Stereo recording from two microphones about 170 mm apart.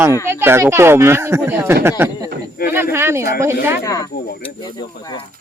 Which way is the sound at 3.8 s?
20° left (ahead or behind).